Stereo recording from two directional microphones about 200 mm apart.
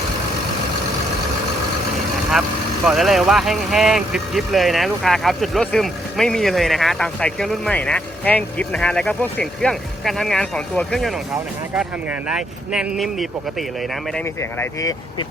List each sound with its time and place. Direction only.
2.8 s speech: centre (ahead or behind)
12.3 s speech: 5° right (ahead or behind)
14.6 s speech: 15° left (ahead or behind)